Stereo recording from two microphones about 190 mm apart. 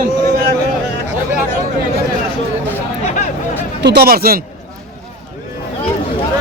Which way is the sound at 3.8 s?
55° right (ahead or behind).